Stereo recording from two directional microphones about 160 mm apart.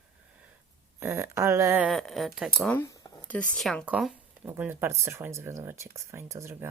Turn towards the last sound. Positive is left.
turn(degrees=-15)  # may be behind; listen again after turning